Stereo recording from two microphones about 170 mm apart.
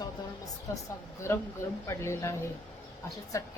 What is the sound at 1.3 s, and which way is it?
A woman's voice, 15° left (ahead or behind).